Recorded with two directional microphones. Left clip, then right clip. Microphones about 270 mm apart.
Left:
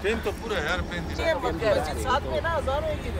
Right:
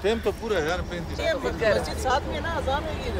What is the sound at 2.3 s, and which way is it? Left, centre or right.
Speech, right.